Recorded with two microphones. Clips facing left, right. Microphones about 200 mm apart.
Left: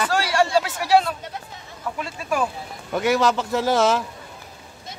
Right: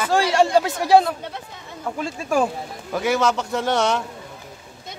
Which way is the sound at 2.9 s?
Centre (ahead or behind).